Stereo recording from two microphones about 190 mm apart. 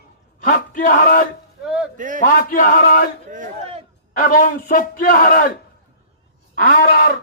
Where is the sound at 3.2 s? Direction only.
40° right (ahead or behind).